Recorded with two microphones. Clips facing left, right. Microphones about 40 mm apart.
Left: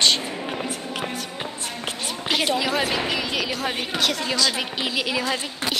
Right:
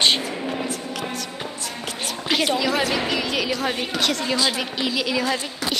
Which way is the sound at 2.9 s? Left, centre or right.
Centre.